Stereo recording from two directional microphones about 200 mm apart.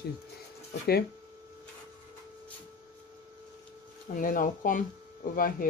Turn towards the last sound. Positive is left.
turn(degrees=45)  # may be behind; listen again after turning